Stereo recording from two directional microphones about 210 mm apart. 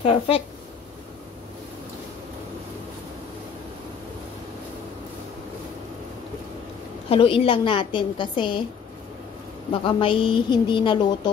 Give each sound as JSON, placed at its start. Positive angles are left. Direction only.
{"t": 0.0, "sound": "a woman's voice", "side_deg": 25}
{"t": 7.1, "sound": "a woman's voice", "side_deg": 25}
{"t": 9.8, "sound": "a woman's voice", "side_deg": 25}